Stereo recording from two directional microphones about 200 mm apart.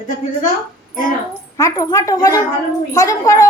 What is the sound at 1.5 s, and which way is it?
A woman's voice, 15° left (ahead or behind).